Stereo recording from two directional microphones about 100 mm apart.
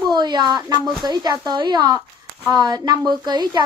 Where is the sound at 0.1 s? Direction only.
45° right (ahead or behind).